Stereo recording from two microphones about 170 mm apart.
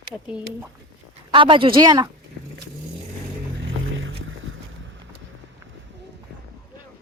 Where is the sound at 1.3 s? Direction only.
30° right (ahead or behind).